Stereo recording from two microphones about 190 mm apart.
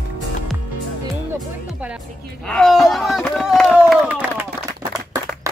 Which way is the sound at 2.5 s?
Centre (ahead or behind).